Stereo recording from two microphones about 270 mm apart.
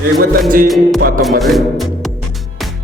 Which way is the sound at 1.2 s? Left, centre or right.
Centre.